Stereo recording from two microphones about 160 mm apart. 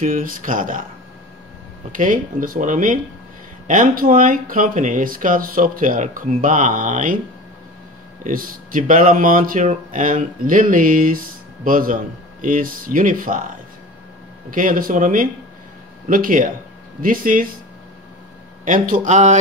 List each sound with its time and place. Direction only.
0.0 s speech: 60° right (ahead or behind)
1.9 s speech: 55° right (ahead or behind)
8.2 s speech: 60° right (ahead or behind)
14.5 s speech: 60° right (ahead or behind)
18.7 s speech: 50° right (ahead or behind)